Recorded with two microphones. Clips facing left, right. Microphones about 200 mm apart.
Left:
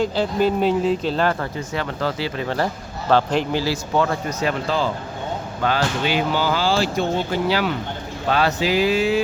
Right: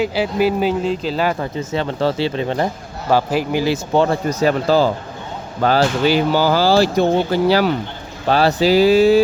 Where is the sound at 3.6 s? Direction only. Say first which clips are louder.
Right 5 dB; 25° right (ahead or behind).